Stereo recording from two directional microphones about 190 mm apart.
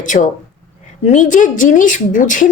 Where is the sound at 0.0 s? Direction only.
40° left (ahead or behind).